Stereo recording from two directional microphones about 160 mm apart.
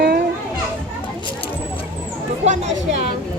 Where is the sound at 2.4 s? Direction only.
45° right (ahead or behind).